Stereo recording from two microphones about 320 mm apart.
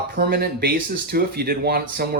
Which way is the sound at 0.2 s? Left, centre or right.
Right.